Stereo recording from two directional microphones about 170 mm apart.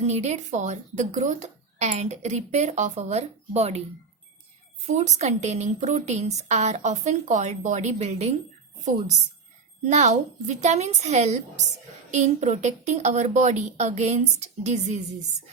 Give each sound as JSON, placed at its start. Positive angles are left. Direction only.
{"t": 0.0, "sound": "speech", "side_deg": -40}
{"t": 4.9, "sound": "a woman's voice", "side_deg": -45}
{"t": 9.8, "sound": "a woman's voice", "side_deg": -45}